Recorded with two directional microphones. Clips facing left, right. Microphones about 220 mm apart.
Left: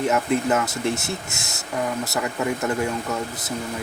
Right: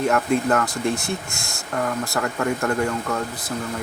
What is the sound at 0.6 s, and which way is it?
Speech, 20° left (ahead or behind).